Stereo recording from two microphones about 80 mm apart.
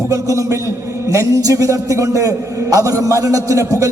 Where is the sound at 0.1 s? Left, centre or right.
Right.